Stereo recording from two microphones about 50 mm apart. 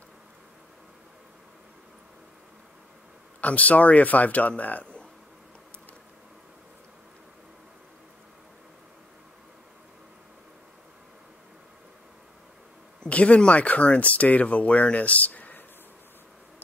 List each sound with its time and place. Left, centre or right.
3.3 s speech: left
13.0 s speech: left